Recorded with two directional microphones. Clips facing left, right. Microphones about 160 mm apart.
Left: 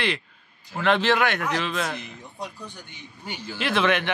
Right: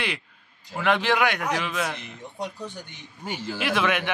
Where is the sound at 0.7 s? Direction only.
10° right (ahead or behind).